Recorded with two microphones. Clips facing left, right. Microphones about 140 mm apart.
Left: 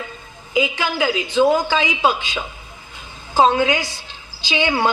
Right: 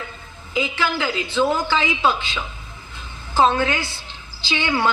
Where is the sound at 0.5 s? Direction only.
15° left (ahead or behind).